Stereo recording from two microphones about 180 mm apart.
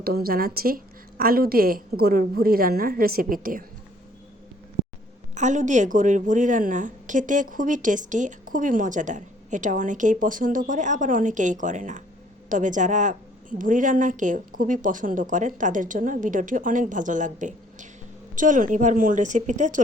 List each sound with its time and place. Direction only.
0.0 s a woman's voice: 55° right (ahead or behind)
5.3 s a woman's voice: 40° right (ahead or behind)